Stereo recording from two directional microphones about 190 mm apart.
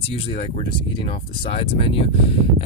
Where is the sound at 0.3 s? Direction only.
30° left (ahead or behind).